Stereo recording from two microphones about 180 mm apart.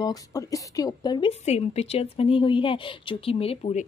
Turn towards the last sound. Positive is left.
turn(degrees=35)  # may be behind; listen again after turning